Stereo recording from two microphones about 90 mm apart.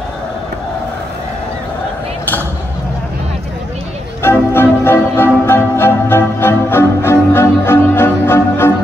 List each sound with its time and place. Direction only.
4.2 s music: 25° left (ahead or behind)